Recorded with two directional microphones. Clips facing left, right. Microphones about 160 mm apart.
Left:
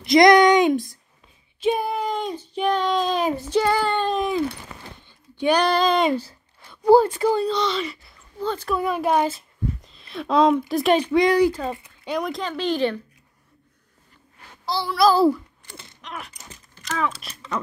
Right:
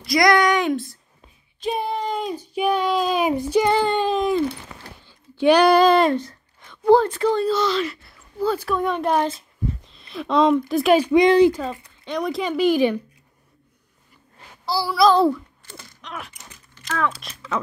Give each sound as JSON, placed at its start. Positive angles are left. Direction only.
{"t": 0.0, "sound": "speech", "side_deg": 20}
{"t": 1.6, "sound": "child singing", "side_deg": 5}
{"t": 3.7, "sound": "a sound", "side_deg": -20}
{"t": 4.0, "sound": "a sound", "side_deg": 0}
{"t": 5.5, "sound": "a child's voice", "side_deg": -10}
{"t": 8.7, "sound": "speech", "side_deg": 5}
{"t": 11.1, "sound": "speech", "side_deg": -20}
{"t": 11.8, "sound": "speech", "side_deg": 5}
{"t": 12.4, "sound": "speech", "side_deg": -10}
{"t": 14.7, "sound": "speech", "side_deg": -5}
{"t": 16.0, "sound": "a sound", "side_deg": 0}
{"t": 16.8, "sound": "speech", "side_deg": 0}